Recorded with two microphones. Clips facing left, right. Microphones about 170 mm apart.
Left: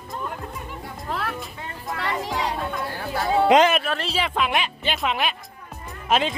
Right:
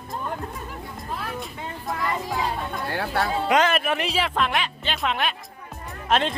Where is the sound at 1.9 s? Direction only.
75° left (ahead or behind).